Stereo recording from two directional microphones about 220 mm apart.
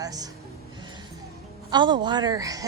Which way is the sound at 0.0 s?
15° right (ahead or behind).